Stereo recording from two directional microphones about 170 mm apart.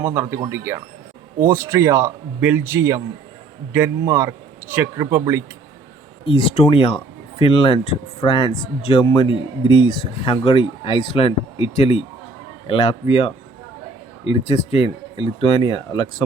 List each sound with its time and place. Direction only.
0.0 s speech: 15° right (ahead or behind)
6.2 s speech: 35° left (ahead or behind)